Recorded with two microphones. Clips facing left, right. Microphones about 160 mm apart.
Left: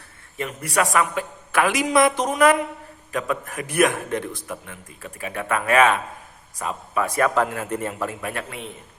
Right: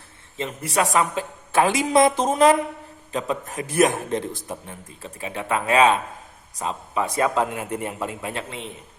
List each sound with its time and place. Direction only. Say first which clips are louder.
0.3 s a man's voice: even; 20° right (ahead or behind)